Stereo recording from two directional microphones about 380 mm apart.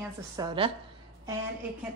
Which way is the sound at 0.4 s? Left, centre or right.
Centre.